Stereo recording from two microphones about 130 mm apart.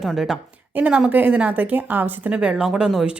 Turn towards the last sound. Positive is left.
turn(degrees=-5)  # may be behind; listen again after turning